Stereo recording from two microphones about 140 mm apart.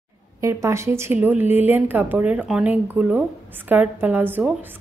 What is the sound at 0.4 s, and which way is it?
A woman's voice, 20° right (ahead or behind).